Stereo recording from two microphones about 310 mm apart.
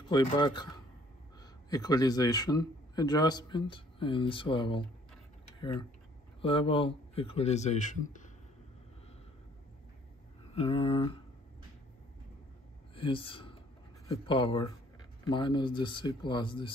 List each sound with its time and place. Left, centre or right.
0.1 s a man's voice: centre
10.5 s speech: centre
12.9 s a man's voice: centre